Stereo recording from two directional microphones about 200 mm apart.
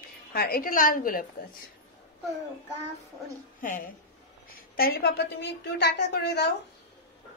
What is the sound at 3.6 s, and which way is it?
A woman's voice, 40° left (ahead or behind).